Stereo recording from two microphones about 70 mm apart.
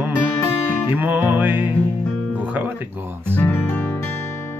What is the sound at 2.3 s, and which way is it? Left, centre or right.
Music, right.